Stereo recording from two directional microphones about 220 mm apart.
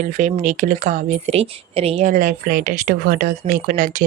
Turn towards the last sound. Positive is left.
turn(degrees=-35)  # may be behind; listen again after turning